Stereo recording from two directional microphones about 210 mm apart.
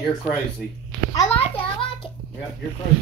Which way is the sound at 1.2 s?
25° left (ahead or behind).